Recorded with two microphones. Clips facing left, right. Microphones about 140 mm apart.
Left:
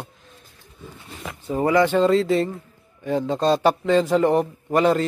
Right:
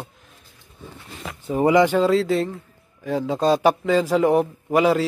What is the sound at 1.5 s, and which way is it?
Speech, 15° right (ahead or behind).